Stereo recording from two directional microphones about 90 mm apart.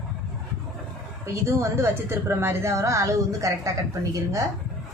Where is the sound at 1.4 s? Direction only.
30° right (ahead or behind).